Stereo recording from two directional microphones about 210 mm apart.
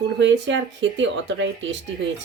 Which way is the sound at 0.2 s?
60° right (ahead or behind).